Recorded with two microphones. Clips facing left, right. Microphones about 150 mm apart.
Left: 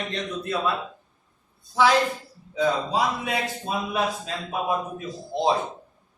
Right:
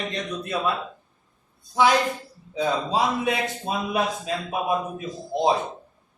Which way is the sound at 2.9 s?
20° right (ahead or behind).